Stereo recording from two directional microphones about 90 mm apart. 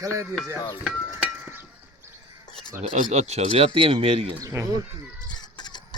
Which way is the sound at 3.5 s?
80° right.